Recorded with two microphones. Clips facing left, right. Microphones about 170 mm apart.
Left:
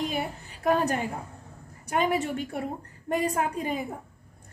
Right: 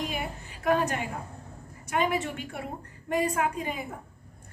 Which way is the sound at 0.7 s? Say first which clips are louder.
Left 1 dB; 35° left (ahead or behind).